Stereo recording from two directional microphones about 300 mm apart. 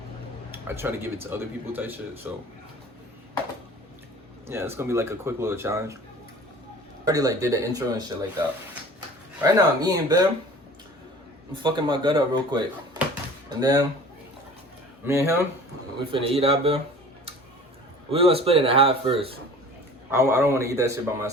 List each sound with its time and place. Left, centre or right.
0.5 s speech: centre
4.4 s speech: centre
7.0 s speech: centre
9.4 s speech: centre
11.5 s speech: centre
15.0 s speech: centre
16.1 s speech: centre
18.1 s speech: centre